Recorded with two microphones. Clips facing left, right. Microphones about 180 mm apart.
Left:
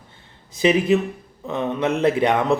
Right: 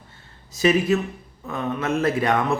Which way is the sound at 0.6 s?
20° left (ahead or behind).